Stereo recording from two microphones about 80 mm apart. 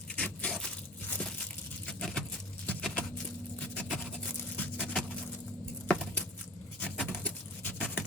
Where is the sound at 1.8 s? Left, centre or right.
Centre.